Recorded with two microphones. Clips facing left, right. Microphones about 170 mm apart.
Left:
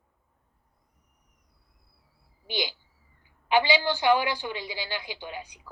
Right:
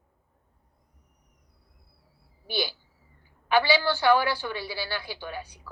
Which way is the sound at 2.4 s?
15° left (ahead or behind).